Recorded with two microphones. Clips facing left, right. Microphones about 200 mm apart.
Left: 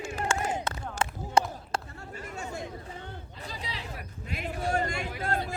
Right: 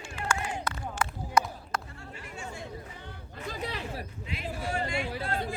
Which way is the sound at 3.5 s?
55° right (ahead or behind).